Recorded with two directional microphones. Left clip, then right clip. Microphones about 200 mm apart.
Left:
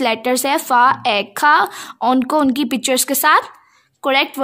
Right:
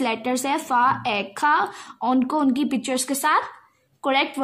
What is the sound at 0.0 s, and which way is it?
A woman's voice, 50° left (ahead or behind).